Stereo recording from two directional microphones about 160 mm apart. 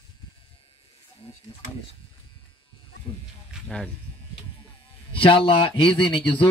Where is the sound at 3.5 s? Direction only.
5° left (ahead or behind).